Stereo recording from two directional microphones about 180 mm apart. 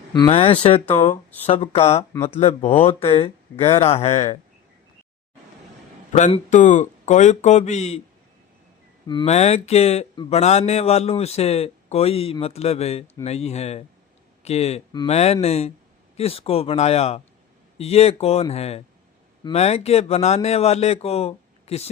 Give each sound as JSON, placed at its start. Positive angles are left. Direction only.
{"t": 0.1, "sound": "speech", "side_deg": 25}
{"t": 6.1, "sound": "speech", "side_deg": 40}
{"t": 9.0, "sound": "speech", "side_deg": 25}
{"t": 9.3, "sound": "speech", "side_deg": 35}